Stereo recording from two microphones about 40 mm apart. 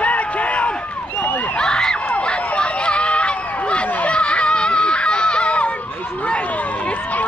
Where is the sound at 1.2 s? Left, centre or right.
Left.